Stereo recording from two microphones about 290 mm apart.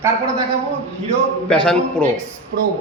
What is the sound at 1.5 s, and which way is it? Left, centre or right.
Speech, centre.